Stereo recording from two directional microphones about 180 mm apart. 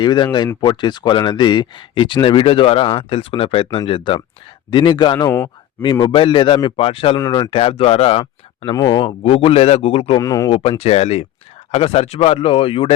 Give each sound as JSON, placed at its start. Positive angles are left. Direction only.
{"t": 0.0, "sound": "speech", "side_deg": 25}
{"t": 7.2, "sound": "speech", "side_deg": 20}
{"t": 10.2, "sound": "speech", "side_deg": 20}
{"t": 10.5, "sound": "speech", "side_deg": 35}